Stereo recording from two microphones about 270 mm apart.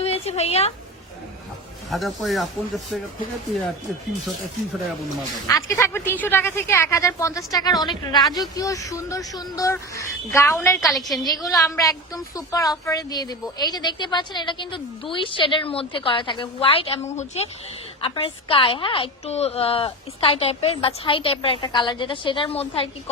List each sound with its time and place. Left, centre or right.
0.0 s a sound: left
1.9 s speech: centre
5.5 s a woman's voice: centre
11.6 s a woman's voice: centre